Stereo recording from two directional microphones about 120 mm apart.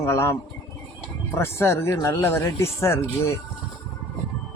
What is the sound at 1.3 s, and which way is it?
Speech, 20° left (ahead or behind).